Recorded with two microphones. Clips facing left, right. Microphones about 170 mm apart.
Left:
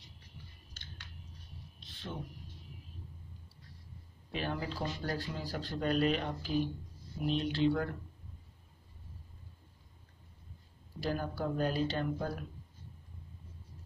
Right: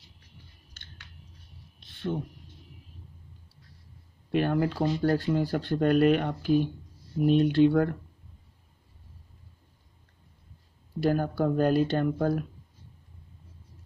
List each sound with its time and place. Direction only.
4.3 s speech: 55° right (ahead or behind)
11.0 s speech: 55° right (ahead or behind)